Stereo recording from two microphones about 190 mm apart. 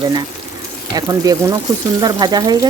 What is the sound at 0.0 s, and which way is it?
Speech, 20° right (ahead or behind).